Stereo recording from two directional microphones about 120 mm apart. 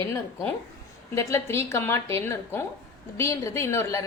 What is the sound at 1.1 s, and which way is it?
A woman's voice, 25° left (ahead or behind).